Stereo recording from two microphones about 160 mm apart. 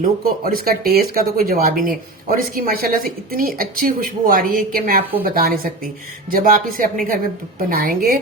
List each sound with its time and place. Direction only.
0.0 s speech: 60° right (ahead or behind)